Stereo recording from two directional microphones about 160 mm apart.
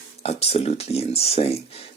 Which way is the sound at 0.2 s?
40° left (ahead or behind).